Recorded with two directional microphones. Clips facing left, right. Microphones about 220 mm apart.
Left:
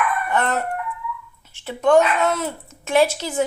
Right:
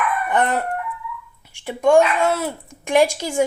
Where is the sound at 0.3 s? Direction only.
15° right (ahead or behind).